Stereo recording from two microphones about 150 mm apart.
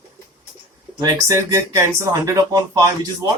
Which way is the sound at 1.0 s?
20° right (ahead or behind).